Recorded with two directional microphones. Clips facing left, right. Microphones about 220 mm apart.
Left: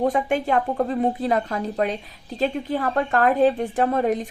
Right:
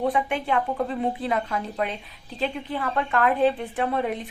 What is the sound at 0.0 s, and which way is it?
A woman's voice, 40° left (ahead or behind).